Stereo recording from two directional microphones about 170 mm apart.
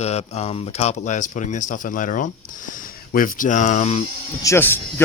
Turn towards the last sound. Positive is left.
turn(degrees=15)  # may be behind; listen again after turning